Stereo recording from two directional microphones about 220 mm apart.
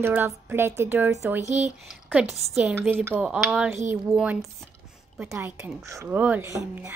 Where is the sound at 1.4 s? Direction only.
30° right (ahead or behind).